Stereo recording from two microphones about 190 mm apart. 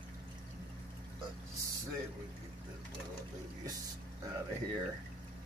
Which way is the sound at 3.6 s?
20° right (ahead or behind).